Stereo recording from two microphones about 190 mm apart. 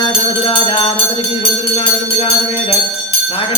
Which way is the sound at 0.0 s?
25° left (ahead or behind).